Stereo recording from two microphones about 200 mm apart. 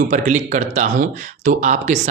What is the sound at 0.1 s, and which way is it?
Speech, 35° right (ahead or behind).